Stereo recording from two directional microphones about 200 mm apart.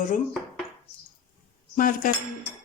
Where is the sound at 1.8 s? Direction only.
45° left (ahead or behind).